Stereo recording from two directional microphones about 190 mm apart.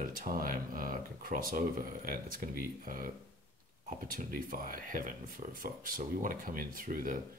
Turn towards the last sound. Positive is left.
turn(degrees=-45)  # may be behind; listen again after turning